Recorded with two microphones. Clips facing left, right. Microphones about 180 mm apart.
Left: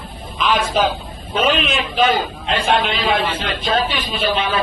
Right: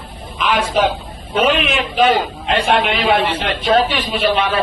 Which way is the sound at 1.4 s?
65° right (ahead or behind).